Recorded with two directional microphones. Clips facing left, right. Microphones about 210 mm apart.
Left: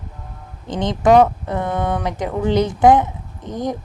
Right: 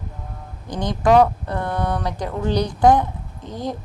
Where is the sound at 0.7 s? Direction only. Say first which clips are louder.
Left 3 dB; 20° left (ahead or behind).